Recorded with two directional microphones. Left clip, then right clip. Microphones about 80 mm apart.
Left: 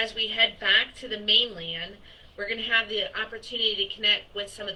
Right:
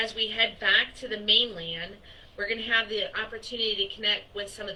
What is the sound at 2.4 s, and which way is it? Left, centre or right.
Speech, left.